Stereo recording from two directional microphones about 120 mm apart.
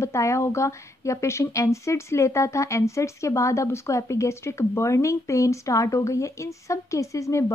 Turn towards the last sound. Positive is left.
turn(degrees=25)  # may be behind; listen again after turning